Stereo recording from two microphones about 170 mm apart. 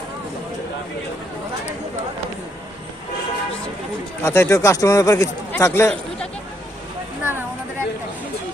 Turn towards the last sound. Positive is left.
turn(degrees=-10)  # may be behind; listen again after turning